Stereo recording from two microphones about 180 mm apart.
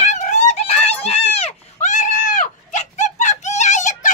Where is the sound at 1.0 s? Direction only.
35° left (ahead or behind).